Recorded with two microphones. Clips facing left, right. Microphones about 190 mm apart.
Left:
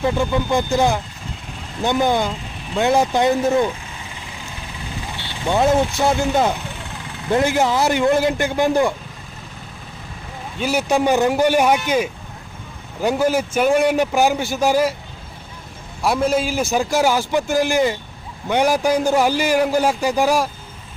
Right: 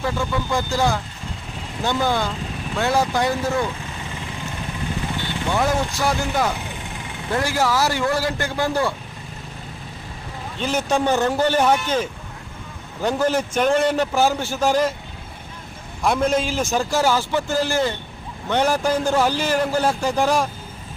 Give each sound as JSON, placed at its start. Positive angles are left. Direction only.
{"t": 0.0, "sound": "speech", "side_deg": 20}
{"t": 5.5, "sound": "speech", "side_deg": 25}
{"t": 10.6, "sound": "a man's voice", "side_deg": 10}
{"t": 16.0, "sound": "a man's voice", "side_deg": 5}